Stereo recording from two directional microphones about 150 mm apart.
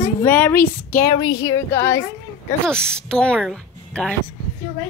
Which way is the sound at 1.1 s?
25° left (ahead or behind).